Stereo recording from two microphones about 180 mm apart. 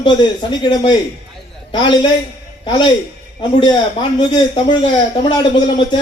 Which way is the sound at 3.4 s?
25° left (ahead or behind).